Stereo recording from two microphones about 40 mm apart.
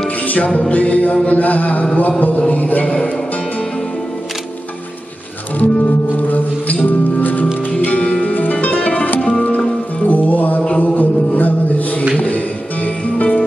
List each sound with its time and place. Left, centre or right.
0.2 s music: left
0.7 s a sound: left
5.6 s music: left